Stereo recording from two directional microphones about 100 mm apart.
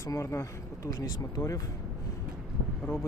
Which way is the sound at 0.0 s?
30° left (ahead or behind).